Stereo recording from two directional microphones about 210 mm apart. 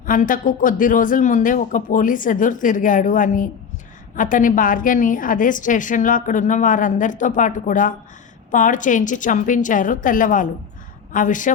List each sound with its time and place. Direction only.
0.0 s a woman's voice: 40° left (ahead or behind)